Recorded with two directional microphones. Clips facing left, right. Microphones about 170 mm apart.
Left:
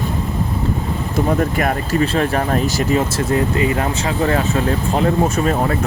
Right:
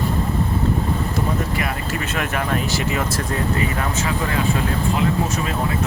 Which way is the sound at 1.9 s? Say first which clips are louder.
Left 9 dB; 35° left (ahead or behind).